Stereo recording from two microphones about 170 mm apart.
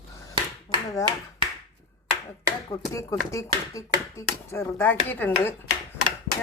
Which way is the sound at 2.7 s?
20° left (ahead or behind).